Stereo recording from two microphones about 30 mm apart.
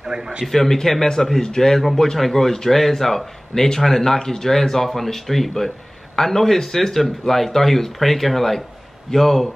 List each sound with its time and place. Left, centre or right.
0.0 s a man's voice: centre
0.5 s speech: centre